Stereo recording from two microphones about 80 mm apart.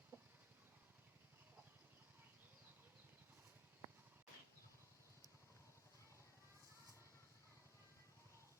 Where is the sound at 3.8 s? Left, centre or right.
Right.